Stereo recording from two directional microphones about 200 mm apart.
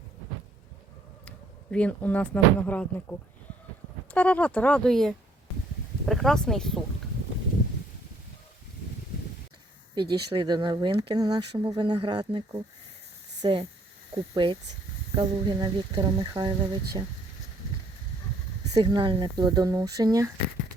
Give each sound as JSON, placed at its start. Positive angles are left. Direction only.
{"t": 1.7, "sound": "speech", "side_deg": 5}
{"t": 9.9, "sound": "speech", "side_deg": -20}
{"t": 18.7, "sound": "speech", "side_deg": -25}